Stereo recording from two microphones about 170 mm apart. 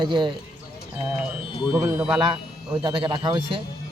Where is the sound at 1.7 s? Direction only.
15° right (ahead or behind).